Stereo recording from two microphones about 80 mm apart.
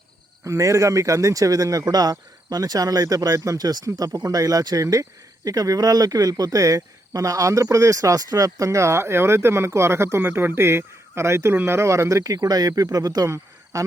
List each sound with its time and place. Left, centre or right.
0.4 s speech: right
13.2 s speech: right